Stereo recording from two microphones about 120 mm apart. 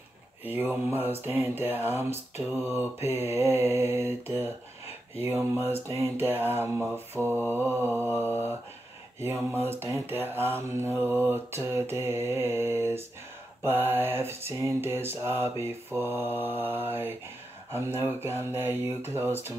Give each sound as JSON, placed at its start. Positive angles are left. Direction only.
{"t": 0.5, "sound": "mantra", "side_deg": -20}